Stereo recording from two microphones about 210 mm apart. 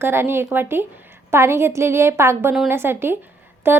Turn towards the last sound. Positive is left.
turn(degrees=-10)  # may be behind; listen again after turning